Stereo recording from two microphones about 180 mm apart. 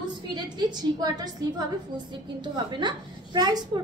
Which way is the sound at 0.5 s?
20° right (ahead or behind).